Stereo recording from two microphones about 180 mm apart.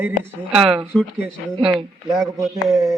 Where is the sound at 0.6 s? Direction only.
30° right (ahead or behind).